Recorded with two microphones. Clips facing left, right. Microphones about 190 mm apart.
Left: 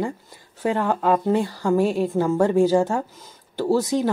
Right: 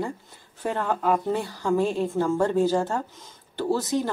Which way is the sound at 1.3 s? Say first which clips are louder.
Left 4 dB; 10° left (ahead or behind).